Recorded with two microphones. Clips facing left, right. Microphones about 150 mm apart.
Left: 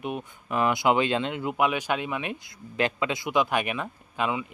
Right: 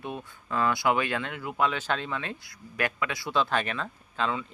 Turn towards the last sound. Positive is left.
turn(degrees=15)  # may be behind; listen again after turning